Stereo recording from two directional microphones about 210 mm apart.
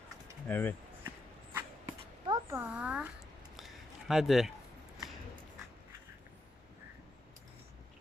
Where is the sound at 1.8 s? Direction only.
20° right (ahead or behind).